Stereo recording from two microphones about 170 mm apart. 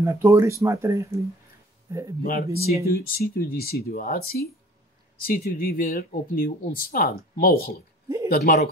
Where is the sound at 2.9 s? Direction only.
60° left (ahead or behind).